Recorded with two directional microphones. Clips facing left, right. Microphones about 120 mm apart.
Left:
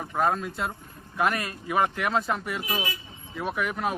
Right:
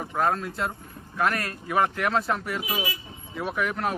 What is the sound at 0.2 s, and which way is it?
Speech, centre (ahead or behind).